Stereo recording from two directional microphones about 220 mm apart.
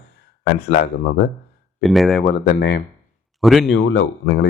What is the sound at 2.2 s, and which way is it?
Speech, 45° left (ahead or behind).